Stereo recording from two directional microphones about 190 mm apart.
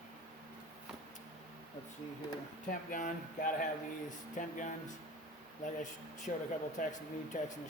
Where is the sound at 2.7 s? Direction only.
45° left (ahead or behind).